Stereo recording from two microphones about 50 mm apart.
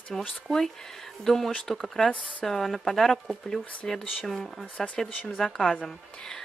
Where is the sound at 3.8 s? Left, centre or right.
Left.